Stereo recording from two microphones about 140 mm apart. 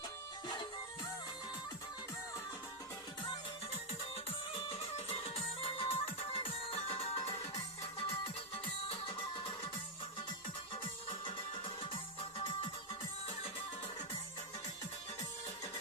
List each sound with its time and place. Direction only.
0.4 s music: 30° left (ahead or behind)
4.3 s music: 40° left (ahead or behind)
11.1 s music: 40° left (ahead or behind)